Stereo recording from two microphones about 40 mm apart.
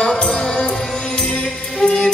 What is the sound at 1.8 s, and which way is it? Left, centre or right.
Music, left.